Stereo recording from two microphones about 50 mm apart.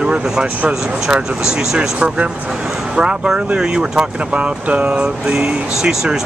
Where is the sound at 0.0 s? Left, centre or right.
Right.